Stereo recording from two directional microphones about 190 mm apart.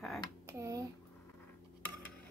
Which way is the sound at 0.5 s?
15° right (ahead or behind).